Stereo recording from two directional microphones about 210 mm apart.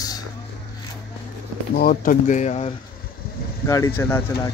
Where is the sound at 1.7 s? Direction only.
45° left (ahead or behind).